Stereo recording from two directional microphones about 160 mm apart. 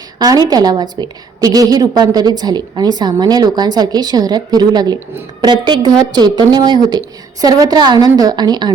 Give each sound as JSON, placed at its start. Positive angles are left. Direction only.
{"t": 0.2, "sound": "a woman's voice", "side_deg": -25}